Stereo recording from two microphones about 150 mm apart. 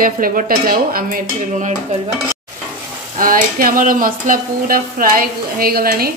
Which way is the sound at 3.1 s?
70° right (ahead or behind).